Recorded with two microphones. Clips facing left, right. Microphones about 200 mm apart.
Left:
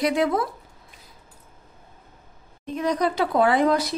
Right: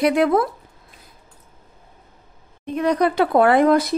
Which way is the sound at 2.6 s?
60° right (ahead or behind).